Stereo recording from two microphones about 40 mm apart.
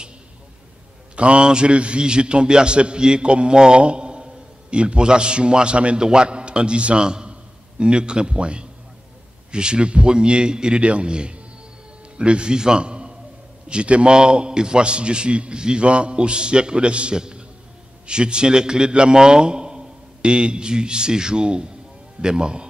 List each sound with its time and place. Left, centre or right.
1.1 s a man's voice: right